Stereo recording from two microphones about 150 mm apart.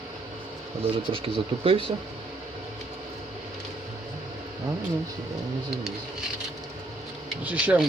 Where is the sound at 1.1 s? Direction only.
35° right (ahead or behind).